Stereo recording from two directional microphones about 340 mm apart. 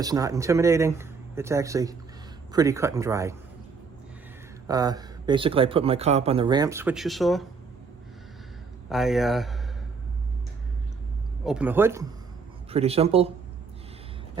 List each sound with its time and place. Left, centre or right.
0.0 s speech: centre
4.6 s speech: centre
8.9 s speech: centre
11.4 s speech: centre
12.7 s speech: centre